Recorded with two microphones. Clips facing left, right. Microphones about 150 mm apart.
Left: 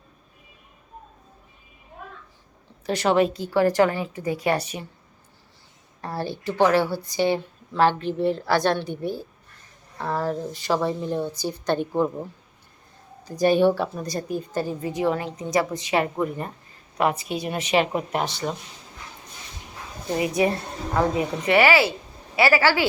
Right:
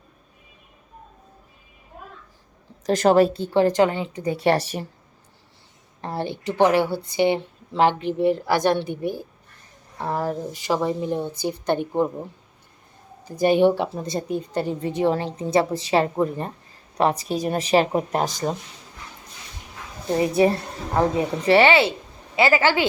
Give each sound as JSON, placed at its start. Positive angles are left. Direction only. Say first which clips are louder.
{"t": 2.8, "sound": "a woman's voice", "louder": "right 4 dB", "side_deg": -40}
{"t": 4.4, "sound": "speech", "louder": "right 5 dB", "side_deg": -35}
{"t": 6.0, "sound": "speech", "louder": "right 2 dB", "side_deg": -20}
{"t": 13.4, "sound": "a woman's voice", "louder": "right 1 dB", "side_deg": -20}
{"t": 20.1, "sound": "a woman's voice", "louder": "right 4 dB", "side_deg": -35}